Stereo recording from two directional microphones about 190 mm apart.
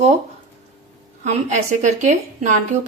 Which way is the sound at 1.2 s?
40° right (ahead or behind).